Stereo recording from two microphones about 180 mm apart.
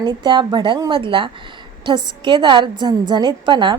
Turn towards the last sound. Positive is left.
turn(degrees=-25)  # may be behind; listen again after turning